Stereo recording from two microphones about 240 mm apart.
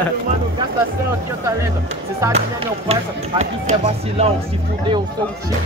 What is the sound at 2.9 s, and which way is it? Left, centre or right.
A man's voice, right.